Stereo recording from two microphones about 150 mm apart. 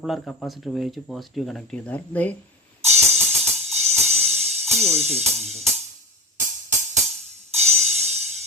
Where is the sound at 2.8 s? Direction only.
45° right (ahead or behind).